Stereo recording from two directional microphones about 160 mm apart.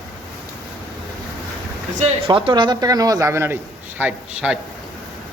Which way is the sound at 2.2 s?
35° right (ahead or behind).